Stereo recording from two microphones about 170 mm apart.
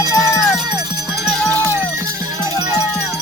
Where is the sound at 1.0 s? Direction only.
Centre (ahead or behind).